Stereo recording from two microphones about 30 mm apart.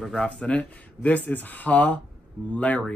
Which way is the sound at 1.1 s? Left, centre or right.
Left.